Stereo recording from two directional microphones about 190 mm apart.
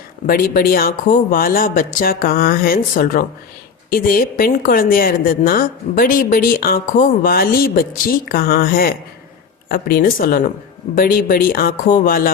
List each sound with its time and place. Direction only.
0.3 s a woman's voice: 50° left (ahead or behind)